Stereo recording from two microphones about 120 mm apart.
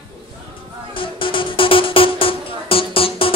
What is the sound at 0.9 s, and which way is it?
Music, 45° left (ahead or behind).